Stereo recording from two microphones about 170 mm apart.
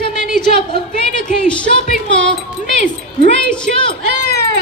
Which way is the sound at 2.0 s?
90° right.